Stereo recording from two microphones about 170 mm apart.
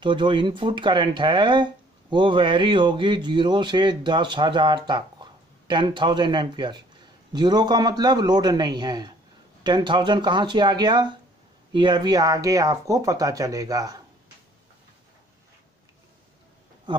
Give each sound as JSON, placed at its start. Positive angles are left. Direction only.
{"t": 0.0, "sound": "speech", "side_deg": -30}